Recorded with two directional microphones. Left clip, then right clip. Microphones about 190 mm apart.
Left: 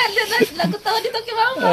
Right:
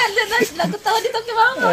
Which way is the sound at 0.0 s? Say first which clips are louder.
Right 1 dB; centre (ahead or behind).